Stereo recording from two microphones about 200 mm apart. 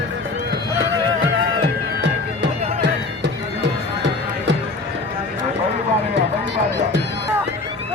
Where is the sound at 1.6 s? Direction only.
55° right (ahead or behind).